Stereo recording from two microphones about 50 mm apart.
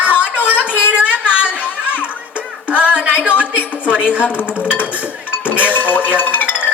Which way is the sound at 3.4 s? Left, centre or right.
Left.